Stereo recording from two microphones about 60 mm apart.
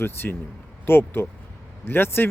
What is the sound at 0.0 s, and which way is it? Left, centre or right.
Speech, left.